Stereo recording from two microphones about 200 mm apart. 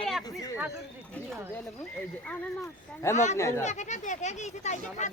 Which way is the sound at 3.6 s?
35° left (ahead or behind).